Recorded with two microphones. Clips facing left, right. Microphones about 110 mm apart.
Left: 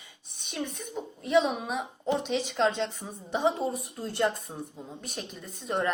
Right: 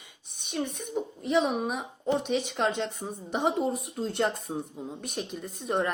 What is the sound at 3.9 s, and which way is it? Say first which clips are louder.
A woman's voice: even; 20° right (ahead or behind).